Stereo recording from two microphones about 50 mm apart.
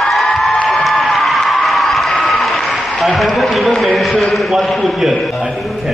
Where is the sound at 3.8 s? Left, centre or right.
Centre.